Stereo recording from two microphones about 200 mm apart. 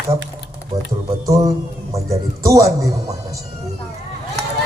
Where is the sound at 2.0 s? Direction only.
15° right (ahead or behind).